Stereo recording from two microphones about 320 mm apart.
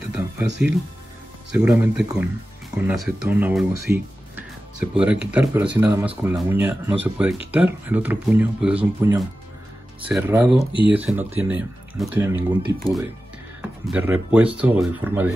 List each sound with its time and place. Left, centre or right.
0.1 s speech: centre
10.6 s speech: centre
10.9 s speech: centre
13.6 s music: centre
14.3 s speech: centre